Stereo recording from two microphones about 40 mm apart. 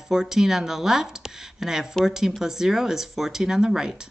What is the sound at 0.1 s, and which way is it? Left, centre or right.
Speech, centre.